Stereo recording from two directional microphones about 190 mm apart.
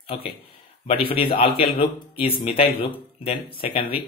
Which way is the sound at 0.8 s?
30° left (ahead or behind).